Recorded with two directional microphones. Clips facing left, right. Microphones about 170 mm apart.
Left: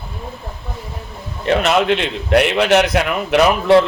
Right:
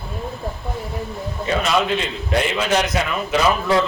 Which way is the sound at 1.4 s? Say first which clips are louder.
Left 5 dB; 70° left (ahead or behind).